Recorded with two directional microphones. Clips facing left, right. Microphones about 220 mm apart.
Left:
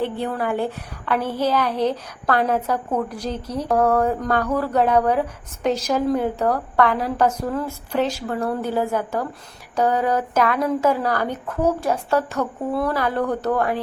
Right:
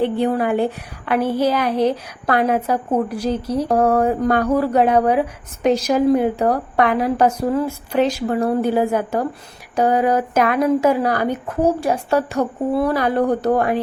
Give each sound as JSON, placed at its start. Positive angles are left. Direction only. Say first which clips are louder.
{"t": 0.0, "sound": "a woman's voice", "louder": "right 6 dB", "side_deg": -20}
{"t": 3.7, "sound": "speech", "louder": "right 1 dB", "side_deg": -30}
{"t": 3.9, "sound": "a woman's voice", "louder": "right 3 dB", "side_deg": -10}
{"t": 12.4, "sound": "a woman's voice", "louder": "right 4 dB", "side_deg": -30}
{"t": 12.9, "sound": "a woman's voice", "louder": "right 4 dB", "side_deg": -15}